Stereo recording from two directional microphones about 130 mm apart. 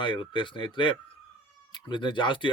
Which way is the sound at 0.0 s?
40° left (ahead or behind).